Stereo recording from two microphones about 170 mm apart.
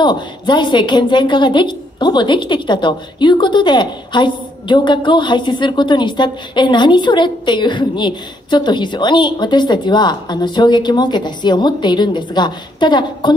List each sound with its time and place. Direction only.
0.0 s a woman's voice: 25° left (ahead or behind)